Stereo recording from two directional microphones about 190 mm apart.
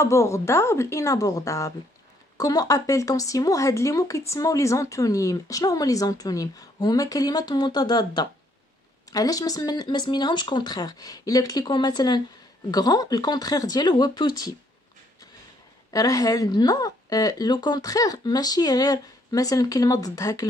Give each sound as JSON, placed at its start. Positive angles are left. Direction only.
{"t": 0.0, "sound": "speech", "side_deg": 15}
{"t": 15.9, "sound": "speech", "side_deg": 20}